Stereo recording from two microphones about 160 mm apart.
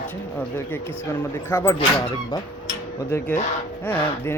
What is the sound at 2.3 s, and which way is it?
Honk, 25° left (ahead or behind).